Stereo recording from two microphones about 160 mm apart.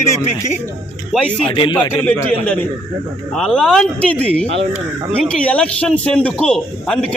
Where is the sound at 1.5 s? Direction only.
30° left (ahead or behind).